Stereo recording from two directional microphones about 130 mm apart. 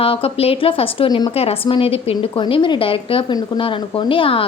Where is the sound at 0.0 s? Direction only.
45° left (ahead or behind).